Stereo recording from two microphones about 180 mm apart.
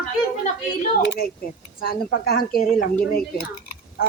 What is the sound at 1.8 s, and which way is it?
Speech, 55° left (ahead or behind).